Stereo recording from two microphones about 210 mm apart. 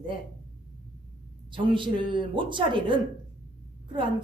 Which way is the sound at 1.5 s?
25° right (ahead or behind).